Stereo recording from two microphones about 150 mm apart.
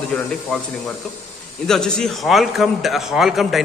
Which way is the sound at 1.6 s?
5° left (ahead or behind).